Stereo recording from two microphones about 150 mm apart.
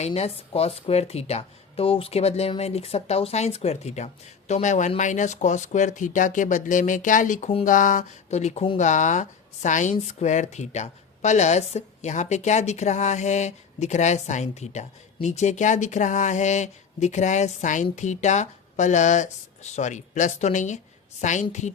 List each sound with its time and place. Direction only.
0.0 s speech: 45° left (ahead or behind)
8.8 s speech: 55° left (ahead or behind)